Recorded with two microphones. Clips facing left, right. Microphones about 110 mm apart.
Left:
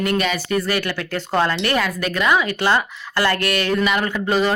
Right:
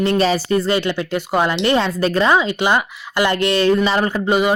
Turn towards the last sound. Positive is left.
turn(degrees=-20)  # may be behind; listen again after turning